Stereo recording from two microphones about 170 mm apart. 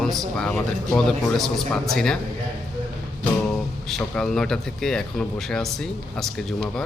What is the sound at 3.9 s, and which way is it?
A man's voice, 5° left (ahead or behind).